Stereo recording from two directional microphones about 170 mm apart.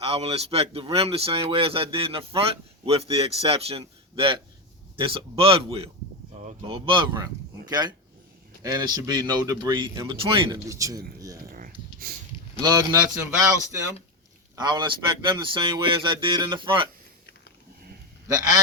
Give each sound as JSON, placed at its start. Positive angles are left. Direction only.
{"t": 0.0, "sound": "a man's voice", "side_deg": -35}
{"t": 10.2, "sound": "speech", "side_deg": -30}
{"t": 10.7, "sound": "a man's voice", "side_deg": -20}
{"t": 11.5, "sound": "a sound", "side_deg": -60}
{"t": 12.6, "sound": "a man's voice", "side_deg": -20}
{"t": 14.5, "sound": "a man's voice", "side_deg": -25}